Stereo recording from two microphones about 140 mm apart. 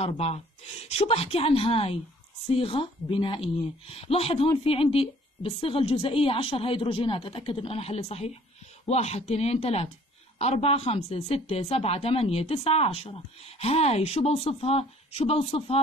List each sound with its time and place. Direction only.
0.0 s a woman's voice: 50° left (ahead or behind)